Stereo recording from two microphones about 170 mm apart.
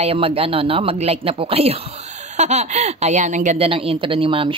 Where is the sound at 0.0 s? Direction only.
35° right (ahead or behind).